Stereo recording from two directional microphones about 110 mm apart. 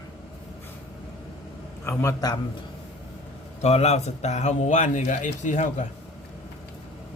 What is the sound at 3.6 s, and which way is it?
A man's voice, 80° left.